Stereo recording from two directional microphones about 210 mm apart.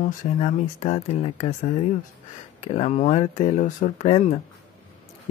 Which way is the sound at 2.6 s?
30° left (ahead or behind).